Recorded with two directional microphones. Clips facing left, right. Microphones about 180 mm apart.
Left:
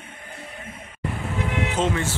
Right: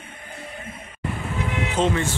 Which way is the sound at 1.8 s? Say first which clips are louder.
Right 3 dB; 5° left (ahead or behind).